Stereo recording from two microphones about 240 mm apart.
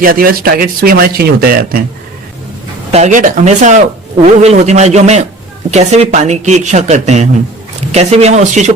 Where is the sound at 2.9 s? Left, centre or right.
Right.